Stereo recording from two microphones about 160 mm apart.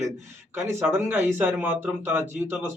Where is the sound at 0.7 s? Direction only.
15° right (ahead or behind).